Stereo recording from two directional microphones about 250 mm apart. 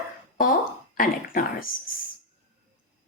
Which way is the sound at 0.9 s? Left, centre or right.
Left.